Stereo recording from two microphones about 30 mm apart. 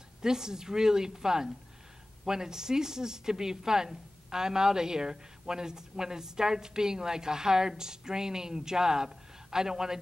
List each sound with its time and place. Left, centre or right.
0.2 s a woman's voice: right